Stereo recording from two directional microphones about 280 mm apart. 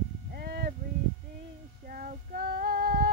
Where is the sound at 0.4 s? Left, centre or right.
Right.